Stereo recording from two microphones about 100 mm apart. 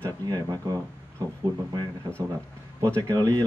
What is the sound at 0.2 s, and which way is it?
Speech, 40° right (ahead or behind).